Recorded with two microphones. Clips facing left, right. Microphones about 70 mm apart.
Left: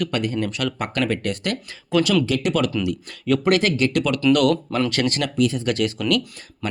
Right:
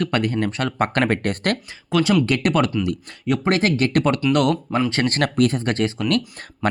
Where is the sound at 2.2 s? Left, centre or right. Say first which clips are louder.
Right 2 dB; right.